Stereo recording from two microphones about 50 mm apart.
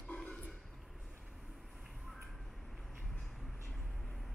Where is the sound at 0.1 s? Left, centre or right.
Left.